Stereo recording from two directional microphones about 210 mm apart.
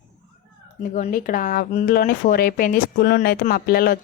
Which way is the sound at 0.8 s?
40° left (ahead or behind).